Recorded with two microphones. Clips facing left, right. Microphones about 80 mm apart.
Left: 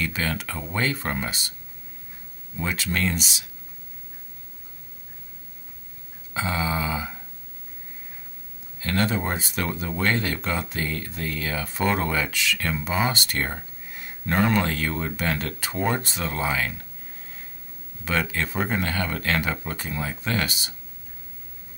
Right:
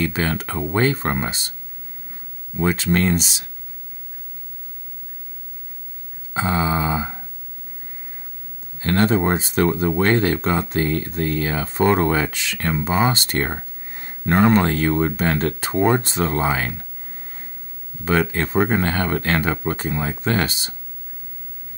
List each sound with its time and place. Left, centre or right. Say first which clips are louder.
0.0 s speech: right 5 dB; right
2.5 s speech: right 8 dB; right
6.3 s a sound: right 5 dB; right
8.7 s speech: right 7 dB; right
18.0 s speech: right 6 dB; right